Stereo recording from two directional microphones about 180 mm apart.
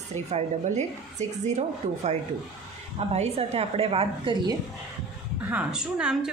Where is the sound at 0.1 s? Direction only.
40° right (ahead or behind).